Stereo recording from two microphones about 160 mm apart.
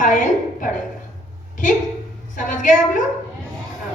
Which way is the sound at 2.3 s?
55° left (ahead or behind).